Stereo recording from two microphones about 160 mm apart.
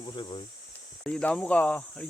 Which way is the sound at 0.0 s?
30° left (ahead or behind).